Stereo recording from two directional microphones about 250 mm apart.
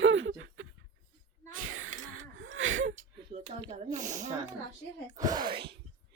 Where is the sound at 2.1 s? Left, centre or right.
Right.